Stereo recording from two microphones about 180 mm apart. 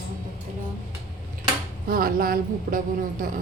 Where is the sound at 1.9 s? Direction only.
50° right (ahead or behind).